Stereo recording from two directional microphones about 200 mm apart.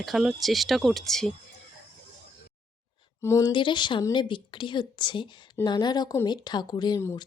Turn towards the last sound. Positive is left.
turn(degrees=15)  # may be behind; listen again after turning